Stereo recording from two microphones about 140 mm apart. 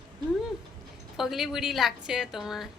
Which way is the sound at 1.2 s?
Centre (ahead or behind).